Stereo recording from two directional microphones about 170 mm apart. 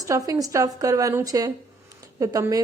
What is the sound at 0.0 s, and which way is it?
A woman's voice, 20° right (ahead or behind).